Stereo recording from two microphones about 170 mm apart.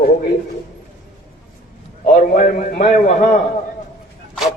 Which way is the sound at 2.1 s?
50° left (ahead or behind).